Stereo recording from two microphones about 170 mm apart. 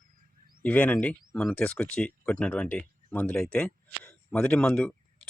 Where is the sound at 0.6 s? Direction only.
10° left (ahead or behind).